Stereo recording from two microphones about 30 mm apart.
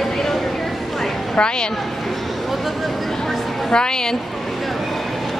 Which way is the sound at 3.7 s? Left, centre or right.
Left.